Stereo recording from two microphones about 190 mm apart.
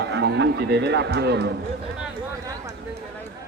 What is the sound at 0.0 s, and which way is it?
A man's voice, 60° right (ahead or behind).